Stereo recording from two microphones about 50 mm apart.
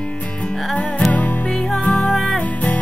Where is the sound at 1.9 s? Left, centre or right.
Centre.